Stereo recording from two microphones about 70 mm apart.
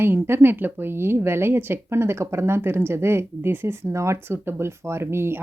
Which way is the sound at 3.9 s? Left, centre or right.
Right.